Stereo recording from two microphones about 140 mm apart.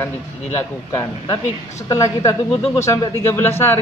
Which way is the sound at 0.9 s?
20° left (ahead or behind).